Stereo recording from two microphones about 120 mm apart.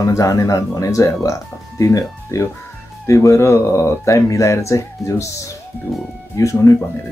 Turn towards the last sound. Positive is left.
turn(degrees=25)  # may be behind; listen again after turning